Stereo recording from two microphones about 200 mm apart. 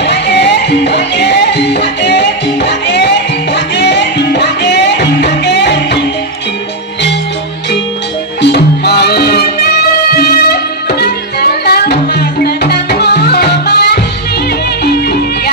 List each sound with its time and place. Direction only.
0.0 s music: 60° left (ahead or behind)
8.4 s music: 55° left (ahead or behind)